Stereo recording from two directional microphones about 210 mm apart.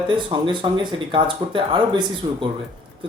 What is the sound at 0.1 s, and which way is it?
Speech, 20° right (ahead or behind).